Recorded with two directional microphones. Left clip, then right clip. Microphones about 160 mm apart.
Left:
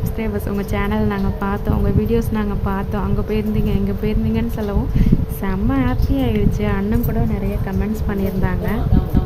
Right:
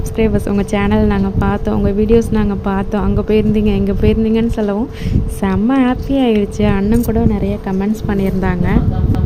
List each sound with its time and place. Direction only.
0.2 s a woman's voice: 25° right (ahead or behind)